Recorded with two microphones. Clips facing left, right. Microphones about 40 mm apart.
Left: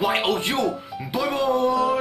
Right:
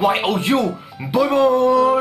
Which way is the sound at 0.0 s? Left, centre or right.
Centre.